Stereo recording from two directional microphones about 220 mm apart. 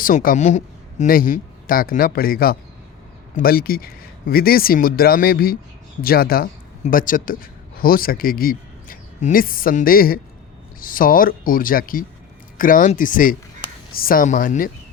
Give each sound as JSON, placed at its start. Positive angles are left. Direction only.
{"t": 0.0, "sound": "speech", "side_deg": 40}